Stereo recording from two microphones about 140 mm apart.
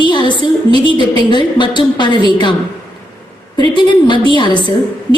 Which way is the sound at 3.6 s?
35° left (ahead or behind).